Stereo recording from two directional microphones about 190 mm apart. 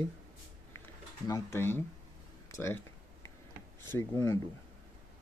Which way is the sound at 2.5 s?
15° left (ahead or behind).